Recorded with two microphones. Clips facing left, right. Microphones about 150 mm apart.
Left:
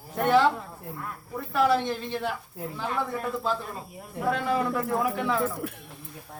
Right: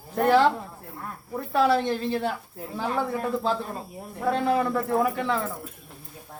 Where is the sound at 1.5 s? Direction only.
30° right (ahead or behind).